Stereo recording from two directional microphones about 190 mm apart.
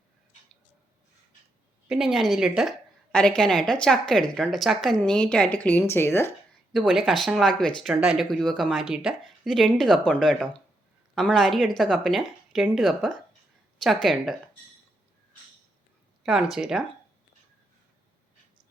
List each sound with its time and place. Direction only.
1.9 s a woman's voice: centre (ahead or behind)
6.7 s a woman's voice: centre (ahead or behind)
16.2 s a woman's voice: 5° right (ahead or behind)